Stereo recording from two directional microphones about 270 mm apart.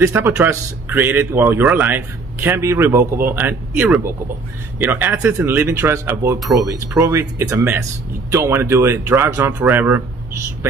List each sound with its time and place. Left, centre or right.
0.0 s speech: centre